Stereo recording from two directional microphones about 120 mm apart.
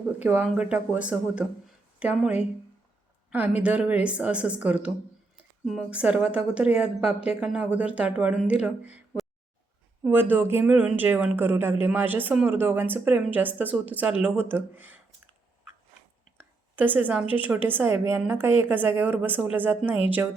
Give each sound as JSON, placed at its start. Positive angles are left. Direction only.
{"t": 0.2, "sound": "speech", "side_deg": -15}
{"t": 5.9, "sound": "speech", "side_deg": -10}
{"t": 16.4, "sound": "a woman's voice", "side_deg": -15}